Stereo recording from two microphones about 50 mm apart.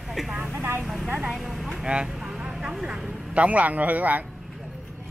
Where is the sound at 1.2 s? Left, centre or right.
Centre.